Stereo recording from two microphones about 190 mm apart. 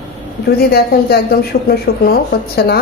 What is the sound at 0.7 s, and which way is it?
Speech, 55° left (ahead or behind).